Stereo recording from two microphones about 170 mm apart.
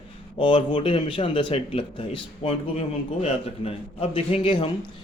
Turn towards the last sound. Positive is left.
turn(degrees=30)  # may be behind; listen again after turning